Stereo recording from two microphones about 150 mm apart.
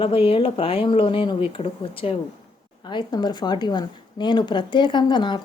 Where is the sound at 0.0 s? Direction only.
40° left (ahead or behind).